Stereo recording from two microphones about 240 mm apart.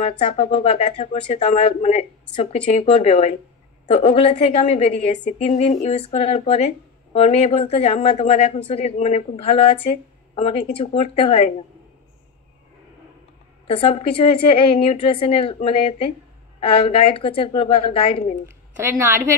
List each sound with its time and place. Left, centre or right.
0.0 s a woman's voice: left
13.7 s a woman's voice: left
18.9 s a woman's voice: centre